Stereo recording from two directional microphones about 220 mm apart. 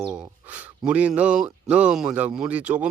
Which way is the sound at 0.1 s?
5° right (ahead or behind).